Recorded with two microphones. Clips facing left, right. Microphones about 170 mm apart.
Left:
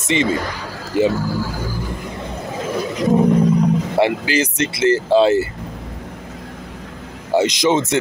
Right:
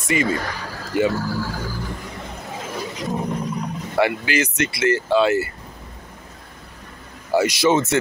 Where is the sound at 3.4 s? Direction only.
90° left.